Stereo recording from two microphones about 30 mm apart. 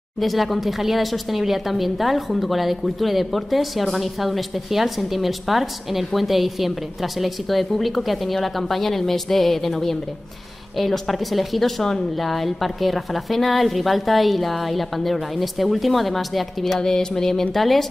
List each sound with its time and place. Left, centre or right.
0.2 s speech: centre
16.8 s a sound: centre
17.6 s speech: centre